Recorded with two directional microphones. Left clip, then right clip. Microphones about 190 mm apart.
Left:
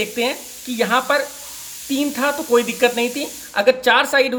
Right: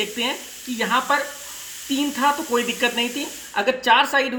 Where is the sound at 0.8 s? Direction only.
35° left (ahead or behind).